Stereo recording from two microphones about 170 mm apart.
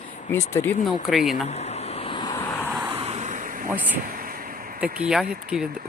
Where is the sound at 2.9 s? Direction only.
40° right (ahead or behind).